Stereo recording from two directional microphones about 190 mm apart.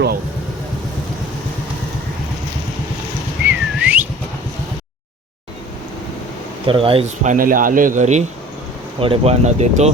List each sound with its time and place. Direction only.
3.4 s whistling: 10° right (ahead or behind)
6.7 s speech: 30° right (ahead or behind)
7.3 s a man's voice: 45° right (ahead or behind)